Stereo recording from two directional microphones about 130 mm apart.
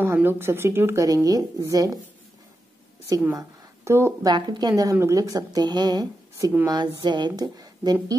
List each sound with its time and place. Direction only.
0.0 s speech: 15° right (ahead or behind)
3.1 s a woman's voice: 25° right (ahead or behind)
4.3 s a woman's voice: 35° right (ahead or behind)